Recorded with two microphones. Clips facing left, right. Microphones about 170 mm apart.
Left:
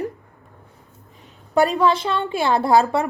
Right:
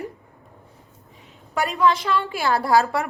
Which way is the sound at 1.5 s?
30° left (ahead or behind).